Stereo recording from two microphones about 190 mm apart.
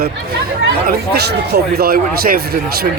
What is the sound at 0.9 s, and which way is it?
A man's voice, 60° right (ahead or behind).